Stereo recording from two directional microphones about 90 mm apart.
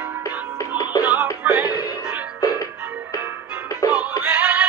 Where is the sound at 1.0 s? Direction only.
15° right (ahead or behind).